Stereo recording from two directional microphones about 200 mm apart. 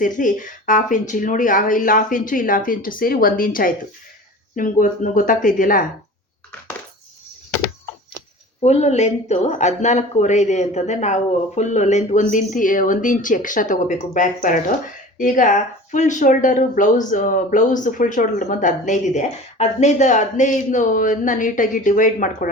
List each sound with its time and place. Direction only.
0.0 s a woman's voice: 40° left (ahead or behind)
8.6 s speech: 35° left (ahead or behind)